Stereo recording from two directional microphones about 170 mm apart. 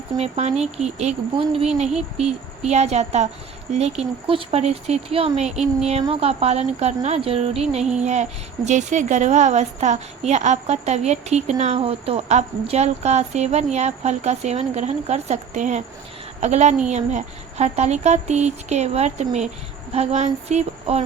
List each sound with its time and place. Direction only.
0.2 s a woman's voice: 40° right (ahead or behind)